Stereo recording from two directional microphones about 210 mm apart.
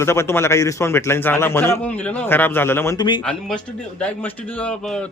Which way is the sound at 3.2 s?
5° left (ahead or behind).